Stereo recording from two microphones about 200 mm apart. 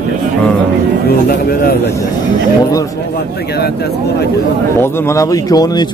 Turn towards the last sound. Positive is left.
turn(degrees=20)  # may be behind; listen again after turning